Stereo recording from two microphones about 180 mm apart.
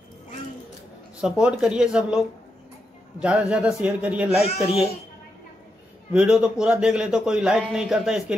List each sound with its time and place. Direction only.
1.2 s a man's voice: 5° right (ahead or behind)
4.4 s speech: 35° left (ahead or behind)
6.1 s a man's voice: 5° right (ahead or behind)